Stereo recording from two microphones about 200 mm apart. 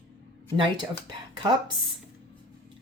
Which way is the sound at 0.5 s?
25° right (ahead or behind).